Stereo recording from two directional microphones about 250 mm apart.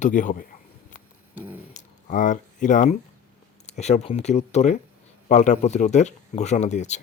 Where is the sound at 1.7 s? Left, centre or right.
Left.